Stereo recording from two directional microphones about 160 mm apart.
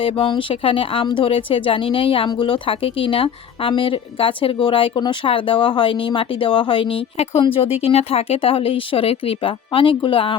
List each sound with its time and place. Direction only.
0.0 s speech: 30° left (ahead or behind)